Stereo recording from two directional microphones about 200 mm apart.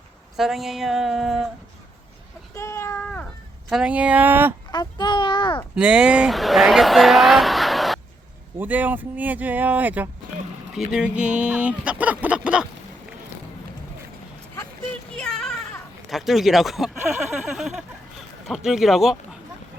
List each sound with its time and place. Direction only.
0.3 s speech: centre (ahead or behind)
2.6 s a sound: 15° left (ahead or behind)
3.7 s speech: 5° right (ahead or behind)
4.7 s a child's voice: 20° left (ahead or behind)
5.7 s speech: 5° right (ahead or behind)
15.1 s a sound: 5° left (ahead or behind)
17.0 s speech: 5° right (ahead or behind)